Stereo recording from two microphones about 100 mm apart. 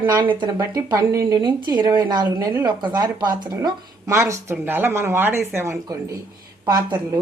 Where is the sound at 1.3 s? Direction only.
50° right (ahead or behind); by 5.4 s 25° right (ahead or behind).